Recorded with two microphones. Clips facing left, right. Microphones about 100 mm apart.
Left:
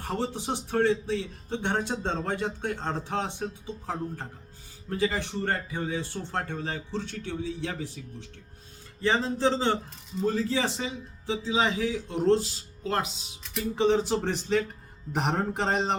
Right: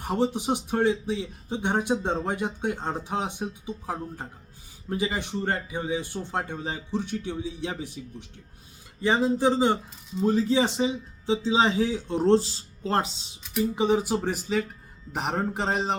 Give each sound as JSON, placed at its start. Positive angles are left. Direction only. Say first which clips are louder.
{"t": 0.0, "sound": "a man's voice", "louder": "right 5 dB", "side_deg": -15}
{"t": 13.7, "sound": "a man's voice", "louder": "left 2 dB", "side_deg": -10}